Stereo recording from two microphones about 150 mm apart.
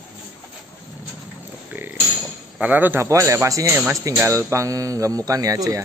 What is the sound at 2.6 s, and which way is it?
Speech, 10° right (ahead or behind).